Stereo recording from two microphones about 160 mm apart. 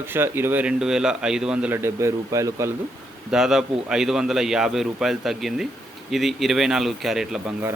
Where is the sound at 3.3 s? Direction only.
Centre (ahead or behind).